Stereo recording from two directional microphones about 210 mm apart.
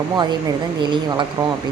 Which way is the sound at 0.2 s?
20° right (ahead or behind).